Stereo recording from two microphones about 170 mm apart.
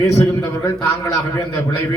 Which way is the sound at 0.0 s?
15° left (ahead or behind).